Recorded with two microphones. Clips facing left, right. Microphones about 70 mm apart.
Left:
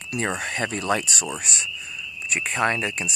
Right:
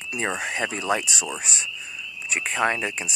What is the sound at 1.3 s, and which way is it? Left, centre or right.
Goose, right.